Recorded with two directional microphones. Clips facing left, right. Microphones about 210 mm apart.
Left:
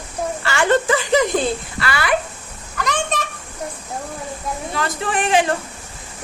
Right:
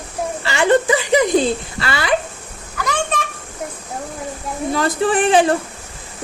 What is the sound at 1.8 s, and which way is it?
Speech, 25° right (ahead or behind).